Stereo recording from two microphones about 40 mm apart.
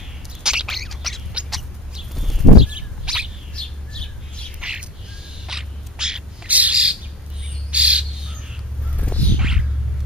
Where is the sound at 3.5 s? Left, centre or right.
Left.